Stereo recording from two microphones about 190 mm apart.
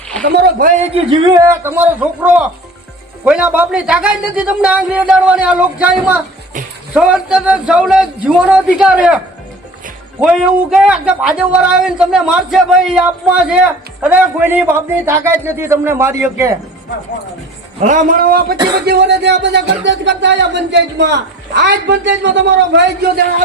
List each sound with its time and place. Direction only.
0.3 s speech: 55° right (ahead or behind)
0.8 s speech: 30° right (ahead or behind)
1.5 s a man's voice: 10° right (ahead or behind)
17.8 s a man's voice: 45° right (ahead or behind)
18.9 s speech: 60° right (ahead or behind)